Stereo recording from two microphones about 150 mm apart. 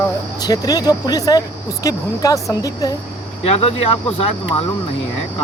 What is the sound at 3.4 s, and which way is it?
Speech, 45° left (ahead or behind).